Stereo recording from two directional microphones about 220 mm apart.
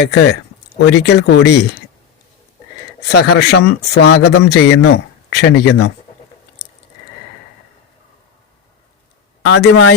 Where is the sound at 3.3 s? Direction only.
50° left (ahead or behind).